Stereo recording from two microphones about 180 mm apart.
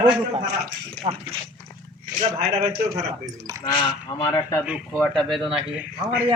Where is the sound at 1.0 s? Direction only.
35° right (ahead or behind).